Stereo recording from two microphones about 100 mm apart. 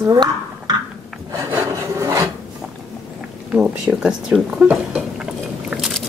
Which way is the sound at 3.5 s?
10° right (ahead or behind).